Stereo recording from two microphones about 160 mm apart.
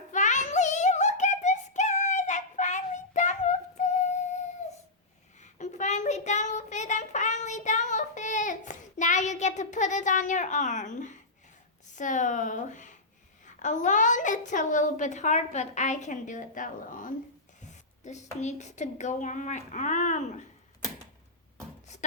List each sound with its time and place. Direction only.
0.1 s child singing: 50° left (ahead or behind)
5.4 s child singing: 45° left (ahead or behind)
11.9 s a woman's voice: 50° left (ahead or behind)